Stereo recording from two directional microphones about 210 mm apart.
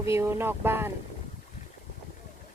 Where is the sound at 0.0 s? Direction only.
15° right (ahead or behind).